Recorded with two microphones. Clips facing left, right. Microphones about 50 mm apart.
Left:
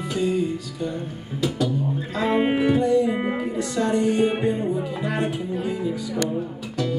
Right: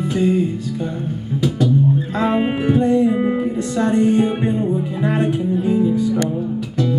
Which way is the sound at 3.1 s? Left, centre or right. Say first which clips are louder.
Right 6 dB; left.